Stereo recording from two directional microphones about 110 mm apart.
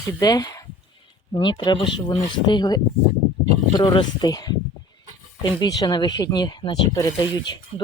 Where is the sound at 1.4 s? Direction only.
45° left (ahead or behind).